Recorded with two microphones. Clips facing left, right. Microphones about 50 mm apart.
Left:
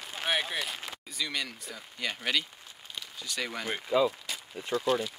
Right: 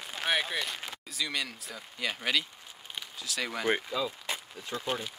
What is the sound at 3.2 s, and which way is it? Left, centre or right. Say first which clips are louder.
Speech: right 1 dB; centre.